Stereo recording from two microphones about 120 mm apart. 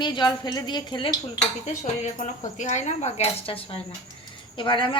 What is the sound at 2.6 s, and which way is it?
Speech, 75° left (ahead or behind).